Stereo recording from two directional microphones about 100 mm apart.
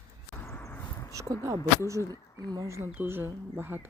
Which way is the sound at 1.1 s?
35° right (ahead or behind).